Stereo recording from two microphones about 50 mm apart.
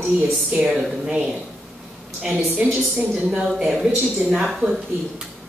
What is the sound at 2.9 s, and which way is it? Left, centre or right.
A woman's voice, centre.